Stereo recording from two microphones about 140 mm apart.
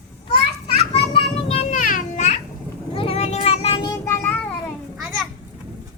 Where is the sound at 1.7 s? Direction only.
70° left (ahead or behind).